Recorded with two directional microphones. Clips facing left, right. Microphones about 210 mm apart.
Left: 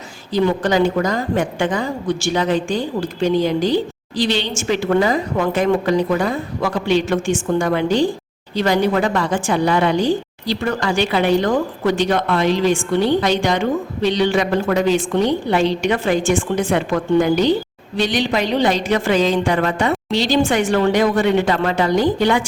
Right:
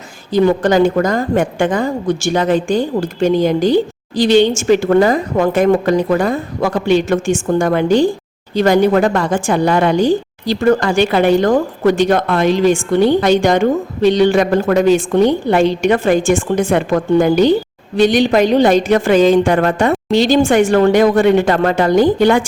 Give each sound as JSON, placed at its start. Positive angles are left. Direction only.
{"t": 0.3, "sound": "a woman's voice", "side_deg": -50}